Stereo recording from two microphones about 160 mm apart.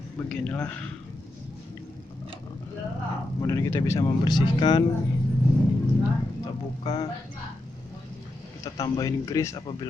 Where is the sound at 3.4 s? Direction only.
20° left (ahead or behind).